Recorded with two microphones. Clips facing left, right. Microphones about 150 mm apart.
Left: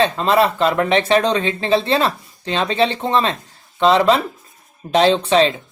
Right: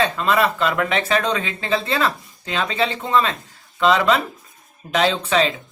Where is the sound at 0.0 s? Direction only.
30° left (ahead or behind).